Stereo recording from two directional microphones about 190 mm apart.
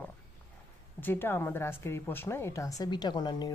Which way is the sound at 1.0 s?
10° left (ahead or behind).